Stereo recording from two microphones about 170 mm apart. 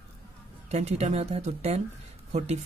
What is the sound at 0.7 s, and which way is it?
Speech, 40° right (ahead or behind).